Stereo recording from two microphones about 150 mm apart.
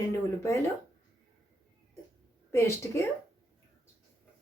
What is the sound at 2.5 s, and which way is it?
Speech, 15° left (ahead or behind).